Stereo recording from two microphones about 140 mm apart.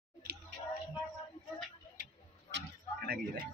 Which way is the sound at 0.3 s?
90° right.